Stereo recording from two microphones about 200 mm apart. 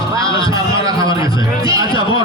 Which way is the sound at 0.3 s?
25° left (ahead or behind).